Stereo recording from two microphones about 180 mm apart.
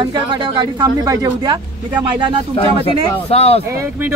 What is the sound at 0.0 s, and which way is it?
Speech, 25° right (ahead or behind).